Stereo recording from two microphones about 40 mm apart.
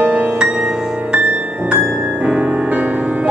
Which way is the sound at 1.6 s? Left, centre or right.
Right.